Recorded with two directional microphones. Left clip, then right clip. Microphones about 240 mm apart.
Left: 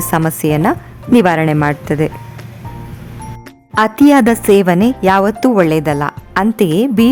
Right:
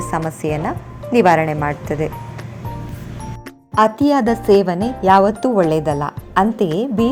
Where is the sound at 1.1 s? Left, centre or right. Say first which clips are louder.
Left 2 dB; left.